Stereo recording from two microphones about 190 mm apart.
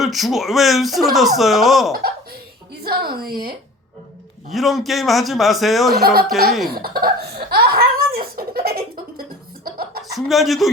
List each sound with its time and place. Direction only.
0.0 s speech: centre (ahead or behind)
2.8 s a woman's voice: 55° right (ahead or behind)
4.5 s speech: centre (ahead or behind)
6.0 s a woman's voice: 55° right (ahead or behind)
6.8 s laughter: 55° right (ahead or behind)
9.6 s chuckle: 50° right (ahead or behind)
10.0 s speech: centre (ahead or behind)